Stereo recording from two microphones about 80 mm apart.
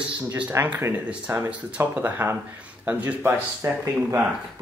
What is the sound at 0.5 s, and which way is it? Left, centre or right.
Speech, right.